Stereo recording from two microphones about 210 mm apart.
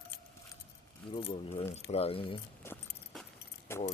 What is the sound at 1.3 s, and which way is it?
Speech, 25° left (ahead or behind).